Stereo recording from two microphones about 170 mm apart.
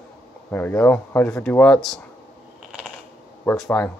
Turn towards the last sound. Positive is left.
turn(degrees=10)  # may be behind; listen again after turning